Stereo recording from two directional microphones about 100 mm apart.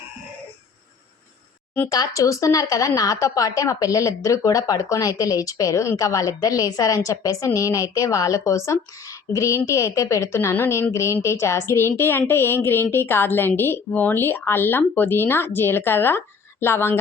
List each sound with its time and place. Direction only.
1.9 s a woman's voice: 35° left (ahead or behind)